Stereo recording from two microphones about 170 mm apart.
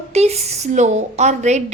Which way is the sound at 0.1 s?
40° right (ahead or behind).